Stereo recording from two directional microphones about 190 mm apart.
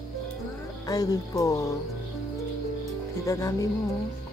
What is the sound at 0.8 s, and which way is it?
Music, 20° left (ahead or behind).